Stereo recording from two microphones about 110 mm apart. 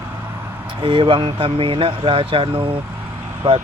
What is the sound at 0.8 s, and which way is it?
Speech, 50° right (ahead or behind).